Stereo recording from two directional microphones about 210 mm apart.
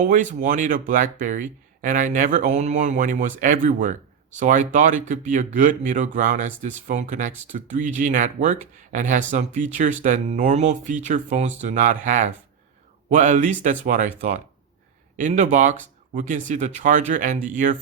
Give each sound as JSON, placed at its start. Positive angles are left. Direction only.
{"t": 0.0, "sound": "speech", "side_deg": -35}